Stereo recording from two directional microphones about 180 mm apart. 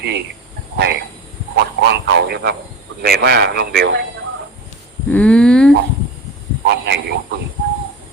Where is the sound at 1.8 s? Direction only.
75° right (ahead or behind).